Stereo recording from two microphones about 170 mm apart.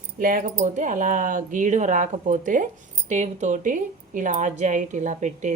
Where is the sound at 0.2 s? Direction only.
55° right (ahead or behind).